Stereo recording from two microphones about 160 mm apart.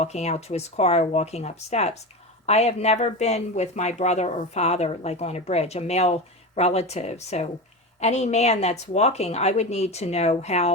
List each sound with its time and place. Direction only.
0.0 s a woman's voice: 45° left (ahead or behind)